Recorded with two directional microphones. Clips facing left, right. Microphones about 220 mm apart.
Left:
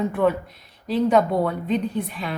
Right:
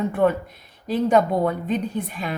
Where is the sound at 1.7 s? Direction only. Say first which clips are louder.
Left 1 dB; 45° right (ahead or behind).